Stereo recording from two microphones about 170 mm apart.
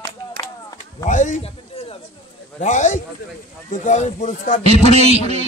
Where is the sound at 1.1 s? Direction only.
45° left (ahead or behind).